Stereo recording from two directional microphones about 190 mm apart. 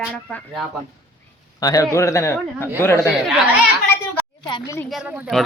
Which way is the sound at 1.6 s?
20° left (ahead or behind).